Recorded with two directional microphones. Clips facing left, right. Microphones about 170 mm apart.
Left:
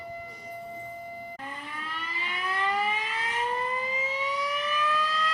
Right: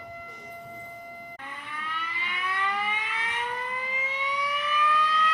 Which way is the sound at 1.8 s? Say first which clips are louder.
Right 4 dB; 35° left (ahead or behind).